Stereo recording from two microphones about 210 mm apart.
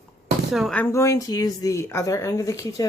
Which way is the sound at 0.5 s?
Centre (ahead or behind).